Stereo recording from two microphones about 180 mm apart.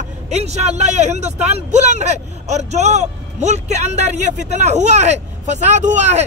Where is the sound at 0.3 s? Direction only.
40° right (ahead or behind).